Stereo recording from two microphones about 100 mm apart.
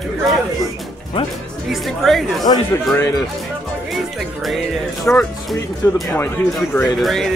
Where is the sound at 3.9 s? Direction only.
Centre (ahead or behind).